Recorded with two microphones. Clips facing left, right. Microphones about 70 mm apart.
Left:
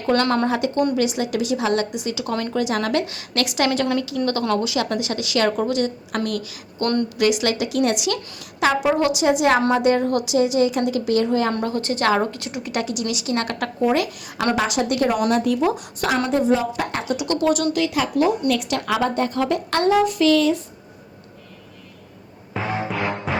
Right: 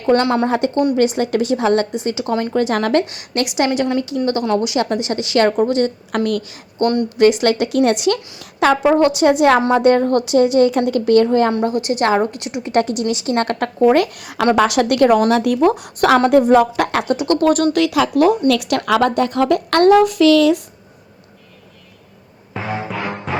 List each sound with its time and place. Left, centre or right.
0.0 s a woman's voice: right
3.1 s a woman's voice: right
3.8 s a woman's voice: centre
4.5 s a woman's voice: right
6.8 s a woman's voice: right
11.3 s a woman's voice: right
11.6 s a woman's voice: centre
12.7 s a woman's voice: right
15.8 s speech: right
17.1 s a woman's voice: right
17.7 s speech: right
22.5 s music: centre